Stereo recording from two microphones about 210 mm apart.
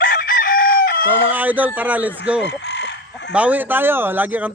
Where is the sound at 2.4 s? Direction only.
55° left (ahead or behind).